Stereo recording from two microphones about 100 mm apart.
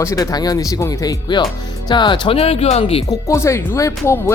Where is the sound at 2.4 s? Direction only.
85° left.